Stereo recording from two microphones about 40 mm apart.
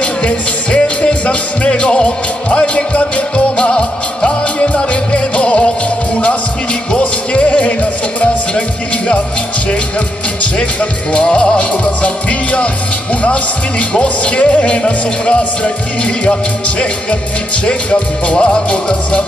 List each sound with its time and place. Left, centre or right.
0.0 s music: left
7.0 s music: left
10.4 s speech: left
11.7 s music: left